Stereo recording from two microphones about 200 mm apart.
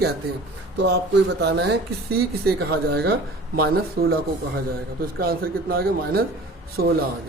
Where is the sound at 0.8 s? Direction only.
60° right (ahead or behind).